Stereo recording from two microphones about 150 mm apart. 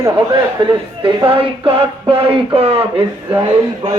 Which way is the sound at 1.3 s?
40° right (ahead or behind).